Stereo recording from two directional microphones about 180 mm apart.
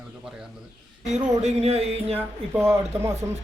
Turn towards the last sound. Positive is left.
turn(degrees=-15)  # may be behind; listen again after turning